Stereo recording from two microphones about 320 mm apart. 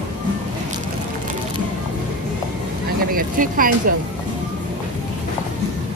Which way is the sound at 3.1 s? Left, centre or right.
Right.